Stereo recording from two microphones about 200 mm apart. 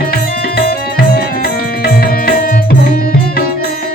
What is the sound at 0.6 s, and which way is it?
Music, 50° left (ahead or behind).